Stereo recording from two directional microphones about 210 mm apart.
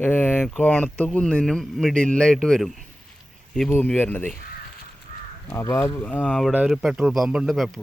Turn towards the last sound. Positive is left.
turn(degrees=0)  # may be behind; listen again after turning